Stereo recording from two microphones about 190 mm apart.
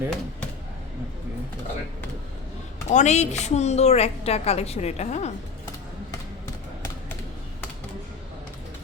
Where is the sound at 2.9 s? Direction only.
35° left (ahead or behind).